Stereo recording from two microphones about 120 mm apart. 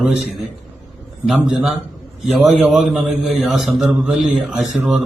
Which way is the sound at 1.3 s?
5° right (ahead or behind).